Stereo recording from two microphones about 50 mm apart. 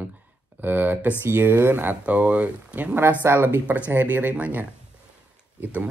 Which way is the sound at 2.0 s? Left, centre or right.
Right.